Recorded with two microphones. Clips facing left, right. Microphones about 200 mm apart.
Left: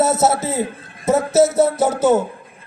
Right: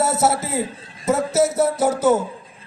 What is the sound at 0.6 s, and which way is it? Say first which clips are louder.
Speech: left 3 dB; 55° left (ahead or behind).